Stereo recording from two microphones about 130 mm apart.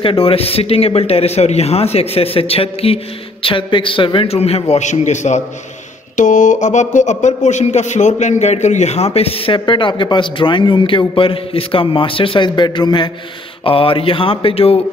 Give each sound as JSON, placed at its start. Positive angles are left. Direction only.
{"t": 0.0, "sound": "speech", "side_deg": 45}
{"t": 6.1, "sound": "speech", "side_deg": 75}